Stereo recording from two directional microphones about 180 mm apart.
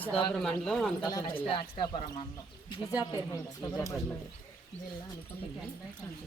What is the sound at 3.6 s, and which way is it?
Speech, 15° left (ahead or behind).